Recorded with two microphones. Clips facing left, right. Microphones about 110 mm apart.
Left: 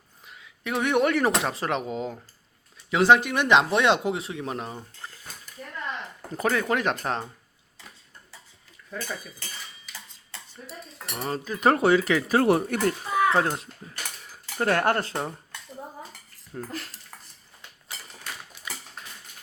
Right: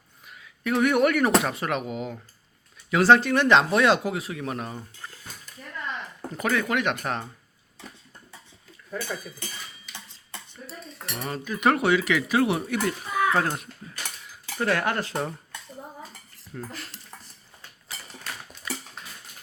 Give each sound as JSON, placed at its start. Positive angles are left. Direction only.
{"t": 0.3, "sound": "speech", "side_deg": 20}
{"t": 2.9, "sound": "speech", "side_deg": 15}
{"t": 6.3, "sound": "speech", "side_deg": 30}
{"t": 11.1, "sound": "speech", "side_deg": 30}
{"t": 13.1, "sound": "a sound", "side_deg": 25}
{"t": 14.3, "sound": "dishes", "side_deg": 45}
{"t": 16.5, "sound": "speech", "side_deg": 25}